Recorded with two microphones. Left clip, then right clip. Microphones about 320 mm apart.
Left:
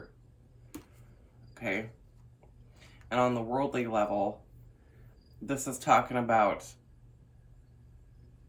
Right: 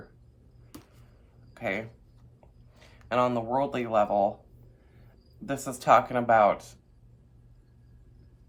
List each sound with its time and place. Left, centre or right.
1.5 s speech: right
3.1 s speech: right
5.5 s speech: right